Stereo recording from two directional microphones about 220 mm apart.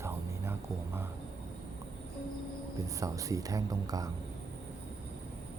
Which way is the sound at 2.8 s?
15° right (ahead or behind).